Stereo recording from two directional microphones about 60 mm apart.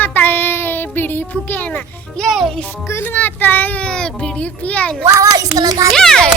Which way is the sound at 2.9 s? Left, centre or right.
Left.